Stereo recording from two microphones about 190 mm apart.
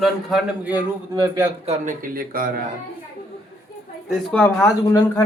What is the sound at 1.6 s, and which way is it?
Speech, 40° right (ahead or behind).